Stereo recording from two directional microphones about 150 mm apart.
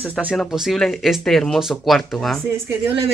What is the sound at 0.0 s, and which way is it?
Speech, 5° right (ahead or behind).